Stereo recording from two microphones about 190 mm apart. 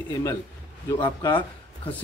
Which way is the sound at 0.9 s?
20° left (ahead or behind).